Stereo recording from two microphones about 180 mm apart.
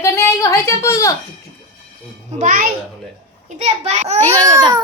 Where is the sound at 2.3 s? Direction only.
50° right (ahead or behind).